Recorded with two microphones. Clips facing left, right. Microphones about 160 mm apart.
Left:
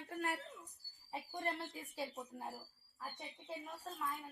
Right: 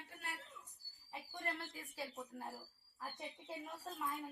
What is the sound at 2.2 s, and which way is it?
Speech, 20° left (ahead or behind).